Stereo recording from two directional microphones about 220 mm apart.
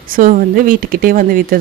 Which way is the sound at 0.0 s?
40° right (ahead or behind).